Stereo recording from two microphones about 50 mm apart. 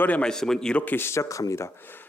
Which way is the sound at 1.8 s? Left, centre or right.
Left.